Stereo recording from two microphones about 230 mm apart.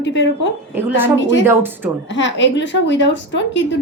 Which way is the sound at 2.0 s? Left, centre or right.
Left.